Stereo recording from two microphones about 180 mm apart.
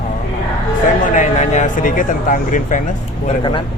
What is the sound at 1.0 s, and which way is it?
Speech, 45° left (ahead or behind).